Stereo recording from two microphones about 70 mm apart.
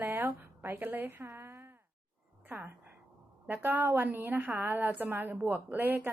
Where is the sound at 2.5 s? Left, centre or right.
Right.